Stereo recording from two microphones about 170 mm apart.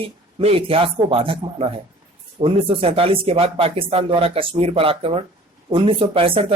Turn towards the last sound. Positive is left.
turn(degrees=-35)  # may be behind; listen again after turning